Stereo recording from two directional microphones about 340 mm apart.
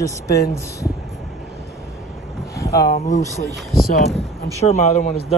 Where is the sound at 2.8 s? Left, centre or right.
Left.